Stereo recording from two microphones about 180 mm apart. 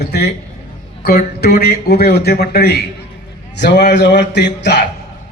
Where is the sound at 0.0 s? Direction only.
65° left (ahead or behind).